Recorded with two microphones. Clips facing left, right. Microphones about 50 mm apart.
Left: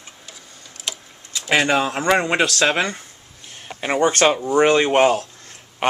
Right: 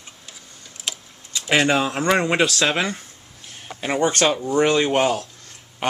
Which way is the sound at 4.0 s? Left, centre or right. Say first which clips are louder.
Left 3 dB; left.